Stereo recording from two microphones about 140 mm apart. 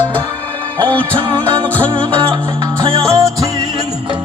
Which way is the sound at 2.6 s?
25° right (ahead or behind).